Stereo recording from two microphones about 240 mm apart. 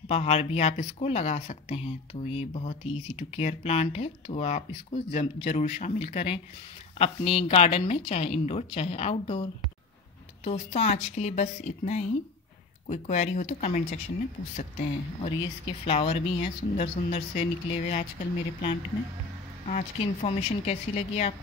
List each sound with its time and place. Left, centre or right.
0.1 s speech: left
19.7 s speech: left